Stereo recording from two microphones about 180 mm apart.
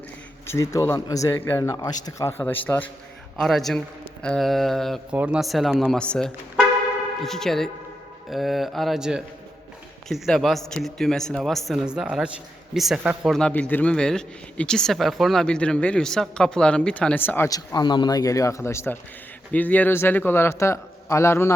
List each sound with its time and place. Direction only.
0.4 s a man's voice: 15° left (ahead or behind); by 13.3 s 5° right (ahead or behind)
13.3 s a man's voice: 5° left (ahead or behind)